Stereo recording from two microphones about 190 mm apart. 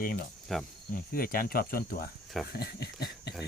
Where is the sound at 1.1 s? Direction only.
50° left (ahead or behind).